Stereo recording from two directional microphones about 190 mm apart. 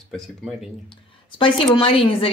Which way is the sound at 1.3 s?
25° left (ahead or behind).